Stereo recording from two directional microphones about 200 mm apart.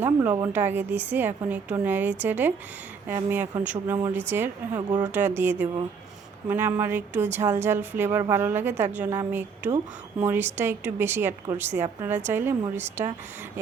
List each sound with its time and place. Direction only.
0.0 s a sound: 10° right (ahead or behind)
0.3 s a woman's voice: 15° right (ahead or behind)
4.9 s a woman's voice: 20° right (ahead or behind)